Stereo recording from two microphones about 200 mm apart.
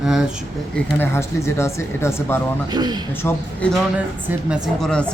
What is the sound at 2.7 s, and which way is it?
Speech, 20° right (ahead or behind).